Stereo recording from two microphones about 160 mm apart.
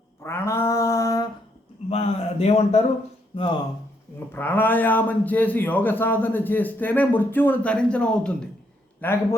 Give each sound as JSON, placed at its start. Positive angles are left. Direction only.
{"t": 0.2, "sound": "mantra", "side_deg": 15}
{"t": 1.9, "sound": "a sound", "side_deg": 40}
{"t": 3.3, "sound": "speech", "side_deg": 35}
{"t": 4.3, "sound": "a man's voice", "side_deg": 15}